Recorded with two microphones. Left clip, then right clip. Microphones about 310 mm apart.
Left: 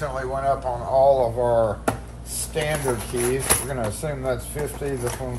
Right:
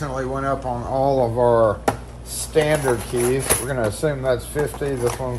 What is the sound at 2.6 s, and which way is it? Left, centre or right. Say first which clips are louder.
Speech: right 4 dB; centre.